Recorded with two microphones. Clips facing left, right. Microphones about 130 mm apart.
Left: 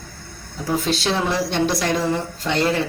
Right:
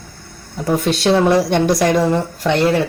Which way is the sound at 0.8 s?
65° right (ahead or behind).